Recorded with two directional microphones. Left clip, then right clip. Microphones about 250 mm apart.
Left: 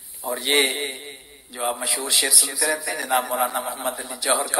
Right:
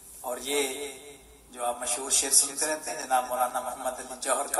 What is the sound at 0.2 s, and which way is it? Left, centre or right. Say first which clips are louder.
A man's voice: left 9 dB; left.